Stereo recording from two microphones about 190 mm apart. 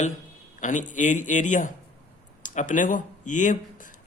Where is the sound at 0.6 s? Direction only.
40° left (ahead or behind).